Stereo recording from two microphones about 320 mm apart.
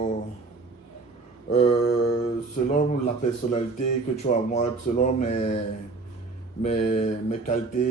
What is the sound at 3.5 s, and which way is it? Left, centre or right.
Speech, left.